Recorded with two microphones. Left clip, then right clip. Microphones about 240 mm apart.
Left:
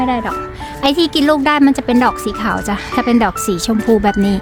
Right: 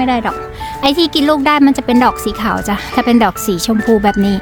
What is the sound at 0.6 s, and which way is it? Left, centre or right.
Speech, centre.